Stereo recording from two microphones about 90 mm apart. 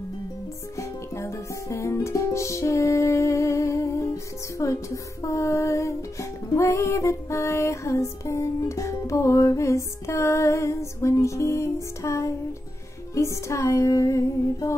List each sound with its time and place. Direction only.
0.7 s music: 30° left (ahead or behind)